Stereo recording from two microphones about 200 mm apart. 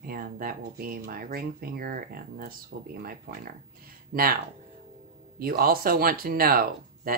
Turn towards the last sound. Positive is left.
turn(degrees=-45)  # may be behind; listen again after turning